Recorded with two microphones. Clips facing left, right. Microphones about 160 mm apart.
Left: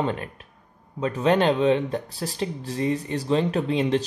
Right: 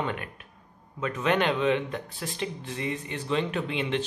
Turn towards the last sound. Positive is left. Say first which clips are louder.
# left 6 dB
turn(degrees=35)  # may be behind; listen again after turning